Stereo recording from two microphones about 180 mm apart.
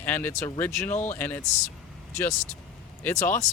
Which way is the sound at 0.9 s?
40° left (ahead or behind).